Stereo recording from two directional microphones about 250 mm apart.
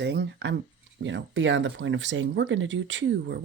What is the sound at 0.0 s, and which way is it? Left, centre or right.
Speech, right.